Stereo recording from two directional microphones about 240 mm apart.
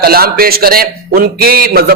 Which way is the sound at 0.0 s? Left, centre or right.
Right.